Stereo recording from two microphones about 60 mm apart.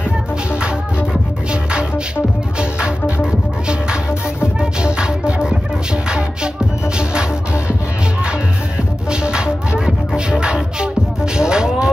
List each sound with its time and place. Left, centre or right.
1.5 s music: centre
3.3 s music: centre
9.1 s music: centre
11.3 s a sound: centre